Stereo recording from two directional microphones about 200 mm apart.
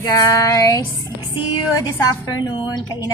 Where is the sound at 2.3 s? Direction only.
20° left (ahead or behind).